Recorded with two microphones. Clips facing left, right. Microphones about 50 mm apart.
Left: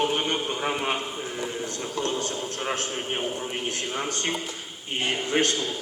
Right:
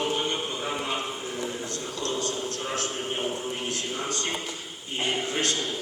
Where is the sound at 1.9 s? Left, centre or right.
Left.